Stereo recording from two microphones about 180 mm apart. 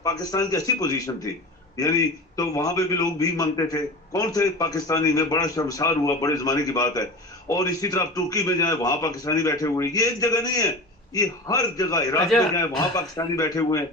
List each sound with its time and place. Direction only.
0.0 s a man's voice: 20° left (ahead or behind)